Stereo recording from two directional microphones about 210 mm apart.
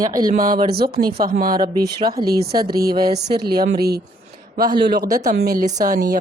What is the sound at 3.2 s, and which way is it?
Speech, 50° right (ahead or behind).